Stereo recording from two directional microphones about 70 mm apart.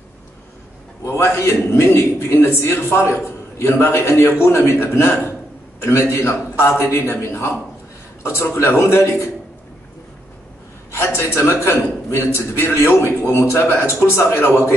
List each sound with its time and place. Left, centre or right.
1.0 s a man's voice: left
10.9 s a man's voice: left